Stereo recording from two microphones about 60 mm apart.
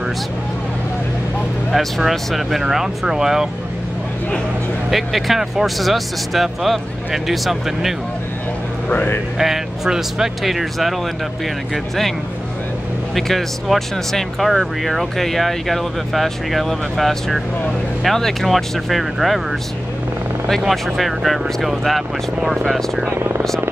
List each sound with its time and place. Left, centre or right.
1.7 s speech: centre
4.9 s speech: centre
8.8 s speech: left
9.4 s speech: centre
13.1 s speech: centre
20.4 s speech: centre
23.0 s speech: right